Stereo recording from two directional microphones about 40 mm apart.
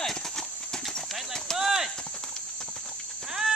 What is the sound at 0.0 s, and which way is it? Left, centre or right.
Clip-clop, centre.